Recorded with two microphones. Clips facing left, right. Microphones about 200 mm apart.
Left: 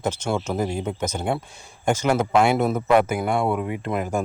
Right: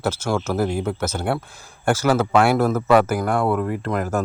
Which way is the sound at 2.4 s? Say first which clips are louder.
Right 2 dB; centre (ahead or behind).